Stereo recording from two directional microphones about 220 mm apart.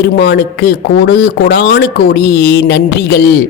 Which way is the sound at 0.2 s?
50° left (ahead or behind).